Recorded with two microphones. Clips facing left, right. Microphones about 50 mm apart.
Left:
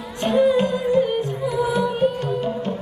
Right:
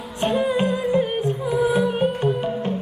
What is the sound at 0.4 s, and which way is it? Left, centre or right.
Music, right.